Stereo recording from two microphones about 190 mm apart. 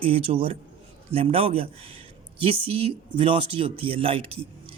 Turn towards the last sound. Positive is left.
turn(degrees=-30)  # may be behind; listen again after turning